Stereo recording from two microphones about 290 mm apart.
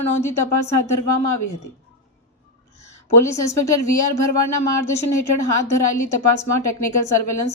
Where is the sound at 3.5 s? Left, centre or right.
Left.